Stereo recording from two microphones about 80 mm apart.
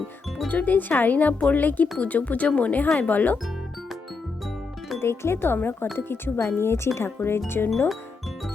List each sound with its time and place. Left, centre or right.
0.4 s speech: centre
4.9 s speech: left